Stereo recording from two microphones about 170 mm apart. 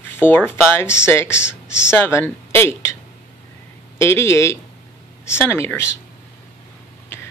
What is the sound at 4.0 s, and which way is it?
Speech, 15° left (ahead or behind).